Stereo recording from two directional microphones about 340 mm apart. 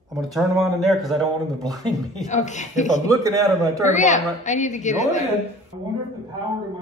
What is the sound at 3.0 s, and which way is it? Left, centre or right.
Speech, centre.